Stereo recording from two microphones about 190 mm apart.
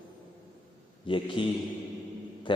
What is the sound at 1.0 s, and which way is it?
Speech, 25° left (ahead or behind).